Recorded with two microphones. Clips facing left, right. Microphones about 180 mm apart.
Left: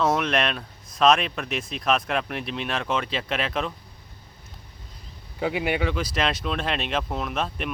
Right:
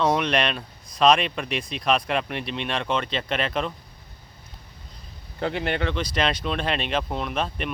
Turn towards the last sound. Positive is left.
turn(degrees=0)  # may be behind; listen again after turning